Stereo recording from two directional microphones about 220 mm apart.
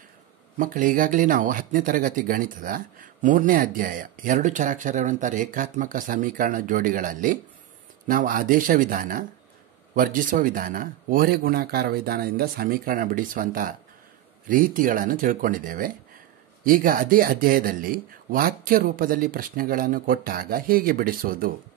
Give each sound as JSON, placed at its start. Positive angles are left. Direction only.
{"t": 0.6, "sound": "speech", "side_deg": -40}